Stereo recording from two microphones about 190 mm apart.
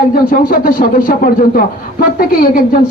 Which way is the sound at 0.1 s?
45° left (ahead or behind).